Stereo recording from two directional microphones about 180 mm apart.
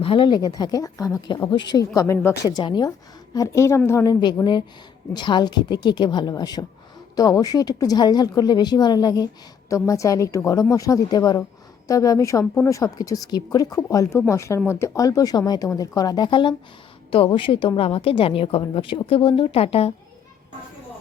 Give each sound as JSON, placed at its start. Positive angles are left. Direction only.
{"t": 0.0, "sound": "a woman's voice", "side_deg": 30}